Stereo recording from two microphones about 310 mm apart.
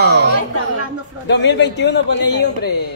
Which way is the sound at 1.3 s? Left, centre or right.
Left.